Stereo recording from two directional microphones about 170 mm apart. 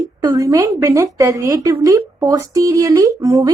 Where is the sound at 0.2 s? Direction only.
20° right (ahead or behind).